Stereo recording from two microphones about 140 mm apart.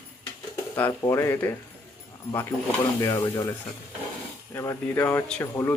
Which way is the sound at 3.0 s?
25° left (ahead or behind).